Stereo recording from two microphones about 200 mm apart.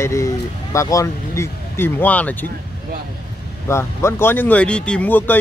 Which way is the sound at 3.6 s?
10° left (ahead or behind).